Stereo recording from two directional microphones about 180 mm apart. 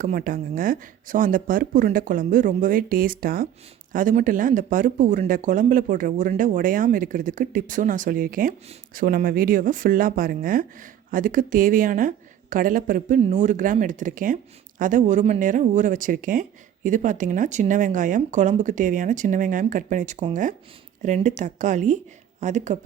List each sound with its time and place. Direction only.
0.0 s speech: 50° right (ahead or behind)